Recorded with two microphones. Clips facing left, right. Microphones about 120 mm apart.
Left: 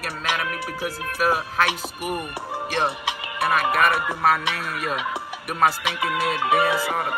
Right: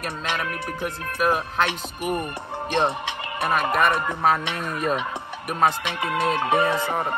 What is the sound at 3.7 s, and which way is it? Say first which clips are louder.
Music: even; 10° left (ahead or behind).